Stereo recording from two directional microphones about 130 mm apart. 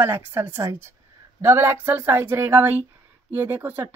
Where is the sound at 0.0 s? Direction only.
15° right (ahead or behind).